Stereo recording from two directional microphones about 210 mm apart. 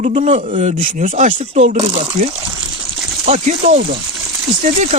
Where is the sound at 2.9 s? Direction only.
Centre (ahead or behind).